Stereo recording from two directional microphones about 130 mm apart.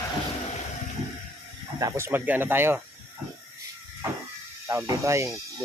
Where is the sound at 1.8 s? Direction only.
20° right (ahead or behind).